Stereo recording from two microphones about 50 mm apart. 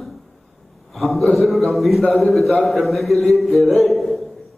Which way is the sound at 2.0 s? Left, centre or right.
Left.